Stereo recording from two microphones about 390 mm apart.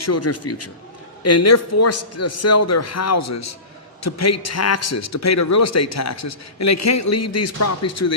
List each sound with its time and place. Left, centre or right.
0.0 s a man's voice: left